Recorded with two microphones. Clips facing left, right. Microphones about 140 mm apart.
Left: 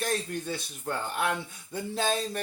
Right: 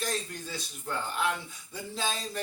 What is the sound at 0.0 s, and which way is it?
A man's voice, 55° left (ahead or behind).